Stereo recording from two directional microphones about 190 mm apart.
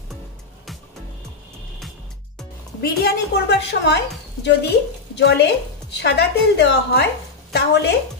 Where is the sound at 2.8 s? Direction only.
60° left (ahead or behind).